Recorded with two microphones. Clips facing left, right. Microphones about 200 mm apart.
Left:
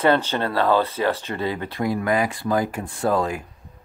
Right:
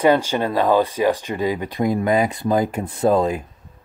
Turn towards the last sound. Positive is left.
turn(degrees=-20)  # may be behind; listen again after turning